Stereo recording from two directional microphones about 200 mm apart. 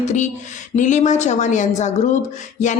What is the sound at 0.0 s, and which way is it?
A woman's voice, 35° left (ahead or behind).